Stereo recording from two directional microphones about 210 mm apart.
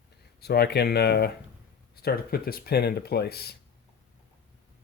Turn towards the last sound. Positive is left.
turn(degrees=50)  # may be behind; listen again after turning